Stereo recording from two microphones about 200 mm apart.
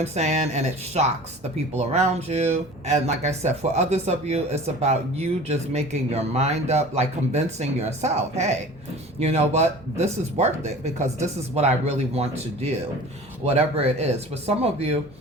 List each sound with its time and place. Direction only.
0.0 s speech: 35° right (ahead or behind)